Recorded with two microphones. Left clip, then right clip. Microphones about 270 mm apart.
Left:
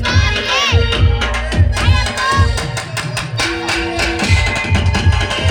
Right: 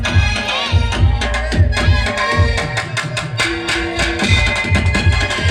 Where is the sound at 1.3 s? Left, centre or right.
Centre.